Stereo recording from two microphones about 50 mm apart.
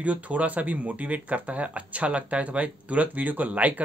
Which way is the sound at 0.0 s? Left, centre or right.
Right.